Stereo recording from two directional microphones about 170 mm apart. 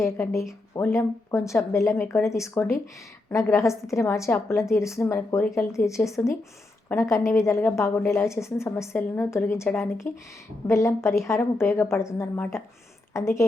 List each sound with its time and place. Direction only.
0.8 s a woman's voice: 15° left (ahead or behind)